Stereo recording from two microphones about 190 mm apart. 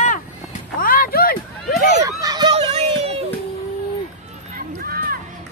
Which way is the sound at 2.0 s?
20° right (ahead or behind).